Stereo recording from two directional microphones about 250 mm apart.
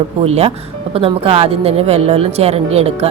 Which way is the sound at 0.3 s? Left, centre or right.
Right.